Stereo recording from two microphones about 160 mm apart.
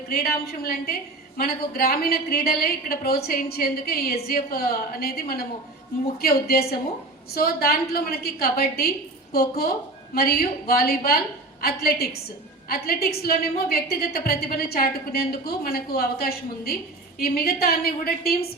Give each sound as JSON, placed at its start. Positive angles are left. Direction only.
{"t": 0.1, "sound": "a woman's voice", "side_deg": 75}